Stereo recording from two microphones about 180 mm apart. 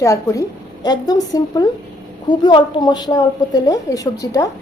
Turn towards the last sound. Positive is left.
turn(degrees=20)  # may be behind; listen again after turning